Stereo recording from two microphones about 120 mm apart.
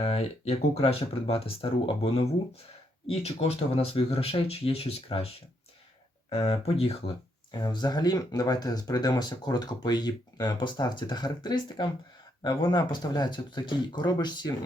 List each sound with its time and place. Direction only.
0.0 s speech: 55° left (ahead or behind)
6.3 s speech: 60° left (ahead or behind)
7.5 s speech: 35° left (ahead or behind)